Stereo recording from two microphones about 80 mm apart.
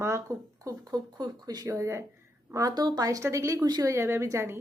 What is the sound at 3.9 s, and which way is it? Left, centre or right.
Speech, right.